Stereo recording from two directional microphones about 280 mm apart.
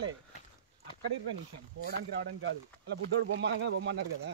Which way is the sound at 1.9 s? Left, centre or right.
Right.